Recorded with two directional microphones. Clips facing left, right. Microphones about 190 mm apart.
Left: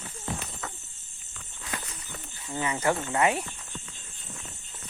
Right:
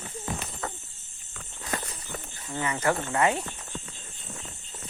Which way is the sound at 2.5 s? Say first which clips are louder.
Even; 15° left (ahead or behind).